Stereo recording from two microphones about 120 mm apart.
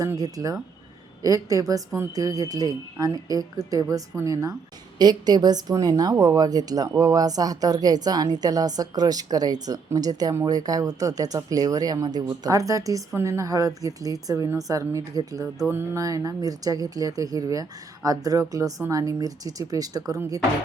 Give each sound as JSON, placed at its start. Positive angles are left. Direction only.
{"t": 0.0, "sound": "a woman's voice", "side_deg": -30}
{"t": 15.7, "sound": "speech", "side_deg": -20}